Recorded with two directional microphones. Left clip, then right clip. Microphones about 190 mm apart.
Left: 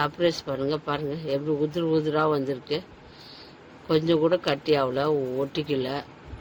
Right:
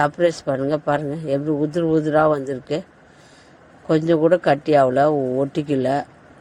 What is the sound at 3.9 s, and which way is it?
Speech, 30° right (ahead or behind).